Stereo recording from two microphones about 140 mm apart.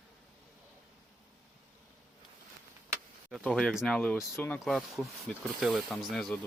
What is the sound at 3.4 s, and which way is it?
Speech, centre (ahead or behind).